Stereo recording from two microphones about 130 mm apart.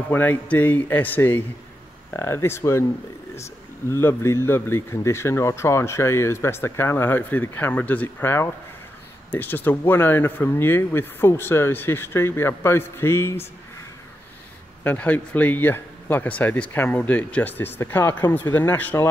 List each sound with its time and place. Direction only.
0.1 s a man's voice: 15° left (ahead or behind)
3.9 s a man's voice: 20° left (ahead or behind)
14.8 s speech: 10° left (ahead or behind)